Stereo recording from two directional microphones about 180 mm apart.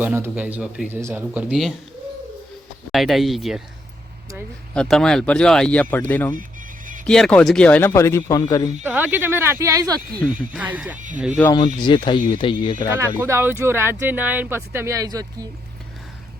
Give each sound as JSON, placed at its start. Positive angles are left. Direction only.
{"t": 0.0, "sound": "speech", "side_deg": -10}
{"t": 2.9, "sound": "speech", "side_deg": 0}
{"t": 4.7, "sound": "speech", "side_deg": 5}
{"t": 8.8, "sound": "speech", "side_deg": -10}
{"t": 10.5, "sound": "speech", "side_deg": -5}
{"t": 10.9, "sound": "speech", "side_deg": -45}
{"t": 11.8, "sound": "speech", "side_deg": 25}
{"t": 12.9, "sound": "speech", "side_deg": -15}